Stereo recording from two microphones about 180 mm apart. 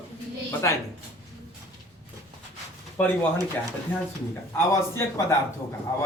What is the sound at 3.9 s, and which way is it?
A man's voice, 10° left (ahead or behind).